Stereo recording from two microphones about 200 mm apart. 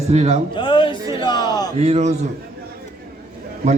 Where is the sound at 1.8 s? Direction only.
35° right (ahead or behind).